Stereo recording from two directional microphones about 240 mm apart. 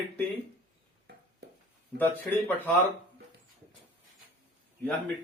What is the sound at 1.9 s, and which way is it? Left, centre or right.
Speech, right.